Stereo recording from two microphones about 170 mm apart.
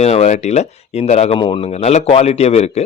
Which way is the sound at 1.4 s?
30° left (ahead or behind).